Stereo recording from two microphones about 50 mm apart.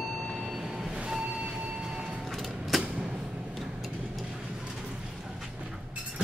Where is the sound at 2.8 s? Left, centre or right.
Right.